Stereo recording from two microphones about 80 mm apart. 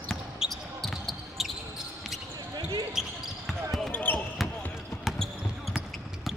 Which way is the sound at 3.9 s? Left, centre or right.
Left.